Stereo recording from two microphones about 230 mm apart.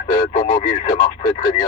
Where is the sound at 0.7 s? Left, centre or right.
Left.